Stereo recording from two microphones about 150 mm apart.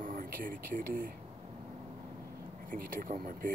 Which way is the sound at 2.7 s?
70° right (ahead or behind).